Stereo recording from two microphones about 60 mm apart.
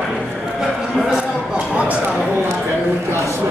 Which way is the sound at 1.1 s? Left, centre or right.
Centre.